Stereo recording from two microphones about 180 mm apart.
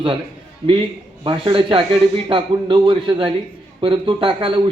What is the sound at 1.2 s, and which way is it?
A man's voice, 25° right (ahead or behind).